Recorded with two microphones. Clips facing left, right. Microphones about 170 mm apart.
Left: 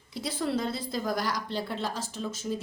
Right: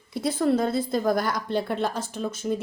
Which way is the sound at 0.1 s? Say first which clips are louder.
Right 7 dB; 55° right (ahead or behind).